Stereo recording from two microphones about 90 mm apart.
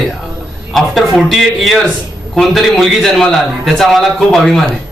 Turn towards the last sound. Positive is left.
turn(degrees=0)  # may be behind; listen again after turning